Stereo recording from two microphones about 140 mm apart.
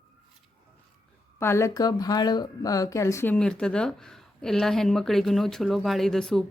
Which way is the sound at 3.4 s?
5° left (ahead or behind).